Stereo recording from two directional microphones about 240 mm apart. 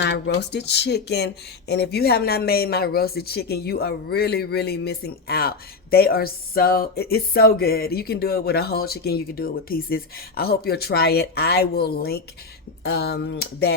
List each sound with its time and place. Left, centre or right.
0.0 s speech: left